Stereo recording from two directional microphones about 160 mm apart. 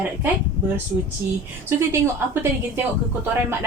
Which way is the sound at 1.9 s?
15° right (ahead or behind).